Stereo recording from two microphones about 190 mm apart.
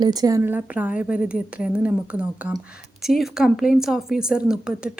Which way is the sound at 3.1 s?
Centre (ahead or behind).